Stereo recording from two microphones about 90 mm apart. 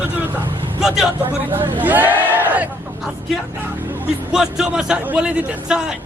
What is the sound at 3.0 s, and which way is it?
Vehicle, centre (ahead or behind).